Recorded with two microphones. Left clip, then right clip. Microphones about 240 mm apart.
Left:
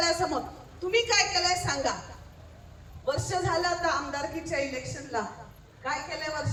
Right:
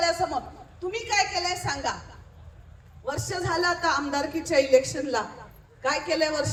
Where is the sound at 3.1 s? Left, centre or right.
Centre; by 6.5 s right.